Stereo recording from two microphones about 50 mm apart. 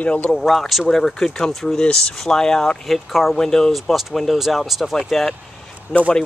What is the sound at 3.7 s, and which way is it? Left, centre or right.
Speech, centre.